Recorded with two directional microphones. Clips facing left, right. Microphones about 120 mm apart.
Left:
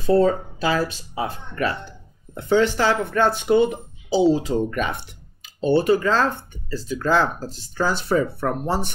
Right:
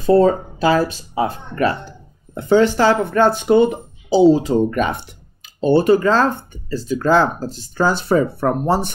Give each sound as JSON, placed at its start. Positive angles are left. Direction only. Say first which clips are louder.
{"t": 0.0, "sound": "speech", "louder": "right 4 dB", "side_deg": -40}